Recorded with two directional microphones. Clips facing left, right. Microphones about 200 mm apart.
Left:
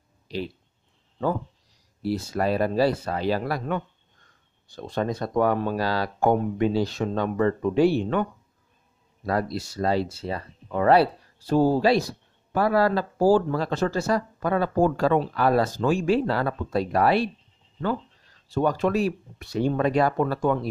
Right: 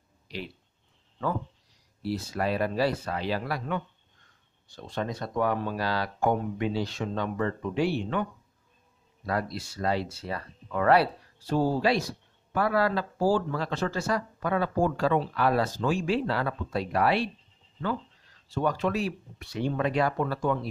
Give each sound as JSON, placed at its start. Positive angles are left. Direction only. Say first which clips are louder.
{"t": 2.0, "sound": "speech", "louder": "left 4 dB", "side_deg": 45}
{"t": 5.8, "sound": "speech", "louder": "left 4 dB", "side_deg": 35}
{"t": 11.4, "sound": "speech", "louder": "left 5 dB", "side_deg": 45}
{"t": 18.5, "sound": "speech", "louder": "left 5 dB", "side_deg": 40}